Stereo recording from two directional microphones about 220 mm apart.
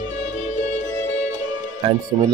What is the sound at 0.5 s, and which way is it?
Music, 35° left (ahead or behind).